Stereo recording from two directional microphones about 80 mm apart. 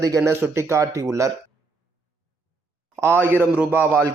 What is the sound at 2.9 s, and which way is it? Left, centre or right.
A man's voice, right.